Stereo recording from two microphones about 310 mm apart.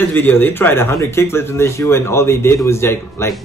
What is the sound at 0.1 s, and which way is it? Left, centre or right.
Speech, centre.